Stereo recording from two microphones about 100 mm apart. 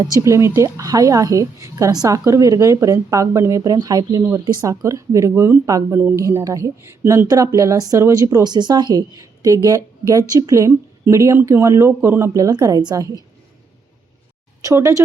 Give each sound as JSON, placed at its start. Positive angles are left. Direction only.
{"t": 0.0, "sound": "a woman's voice", "side_deg": -30}
{"t": 4.2, "sound": "a woman's voice", "side_deg": -30}
{"t": 7.3, "sound": "a woman's voice", "side_deg": -35}
{"t": 8.4, "sound": "a woman's voice", "side_deg": -45}
{"t": 14.6, "sound": "speech", "side_deg": -30}